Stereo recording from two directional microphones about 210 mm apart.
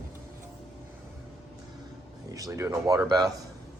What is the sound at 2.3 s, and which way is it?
Speech, 15° right (ahead or behind).